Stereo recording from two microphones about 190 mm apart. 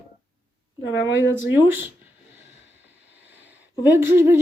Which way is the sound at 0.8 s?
70° left (ahead or behind).